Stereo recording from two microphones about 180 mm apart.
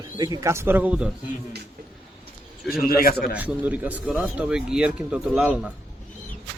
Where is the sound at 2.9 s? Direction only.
55° left (ahead or behind).